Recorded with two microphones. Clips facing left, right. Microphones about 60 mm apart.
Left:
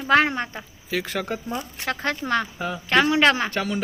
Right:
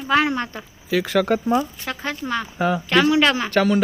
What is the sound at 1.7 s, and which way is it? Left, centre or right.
Speech, left.